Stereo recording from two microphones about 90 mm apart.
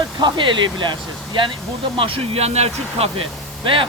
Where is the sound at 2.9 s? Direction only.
90° right.